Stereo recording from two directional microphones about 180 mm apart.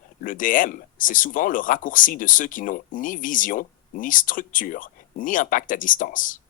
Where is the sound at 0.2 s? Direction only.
50° left (ahead or behind).